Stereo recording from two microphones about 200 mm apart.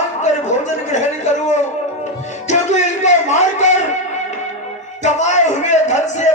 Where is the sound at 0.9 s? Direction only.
35° left (ahead or behind).